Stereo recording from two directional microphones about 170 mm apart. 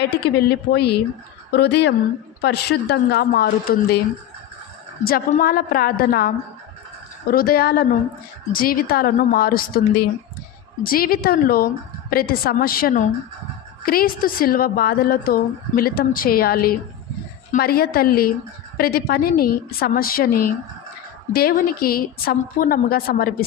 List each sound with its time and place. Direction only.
0.0 s a woman's voice: 70° left (ahead or behind)
5.3 s a woman's voice: 55° left (ahead or behind)
10.8 s a woman's voice: 60° left (ahead or behind)